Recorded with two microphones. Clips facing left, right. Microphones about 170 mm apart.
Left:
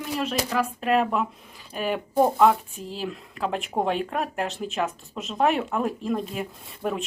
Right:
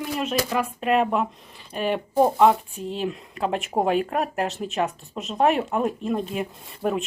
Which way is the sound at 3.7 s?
30° right (ahead or behind).